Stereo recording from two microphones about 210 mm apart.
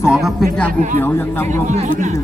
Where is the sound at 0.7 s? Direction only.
40° right (ahead or behind).